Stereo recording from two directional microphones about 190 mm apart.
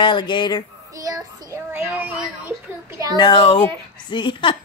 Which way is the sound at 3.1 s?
25° left (ahead or behind).